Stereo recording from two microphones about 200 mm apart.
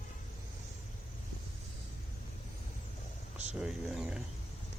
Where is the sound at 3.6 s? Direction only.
5° right (ahead or behind).